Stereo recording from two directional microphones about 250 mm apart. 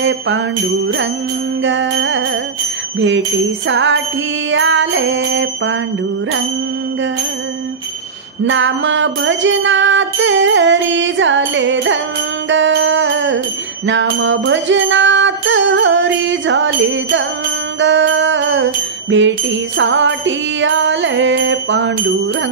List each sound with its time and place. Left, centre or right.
1.6 s music: right
3.6 s music: right
8.5 s music: right
17.7 s jingle bell: right
19.8 s music: right